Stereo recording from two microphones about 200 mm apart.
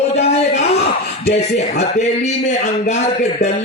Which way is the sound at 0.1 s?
35° left (ahead or behind).